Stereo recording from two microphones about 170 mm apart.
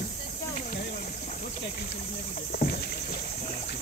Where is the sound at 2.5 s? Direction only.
60° left (ahead or behind).